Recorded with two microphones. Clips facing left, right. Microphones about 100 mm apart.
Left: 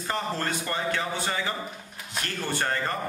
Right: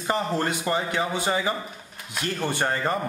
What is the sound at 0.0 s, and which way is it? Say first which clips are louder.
A man's voice: right 4 dB; 15° right (ahead or behind).